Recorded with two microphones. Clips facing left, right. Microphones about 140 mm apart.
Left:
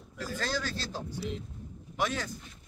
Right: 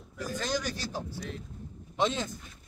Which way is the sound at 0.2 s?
15° right (ahead or behind).